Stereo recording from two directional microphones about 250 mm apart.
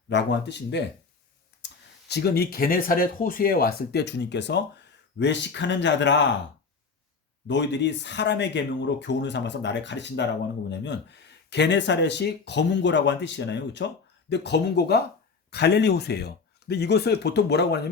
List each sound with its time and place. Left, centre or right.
0.1 s speech: left
7.4 s speech: left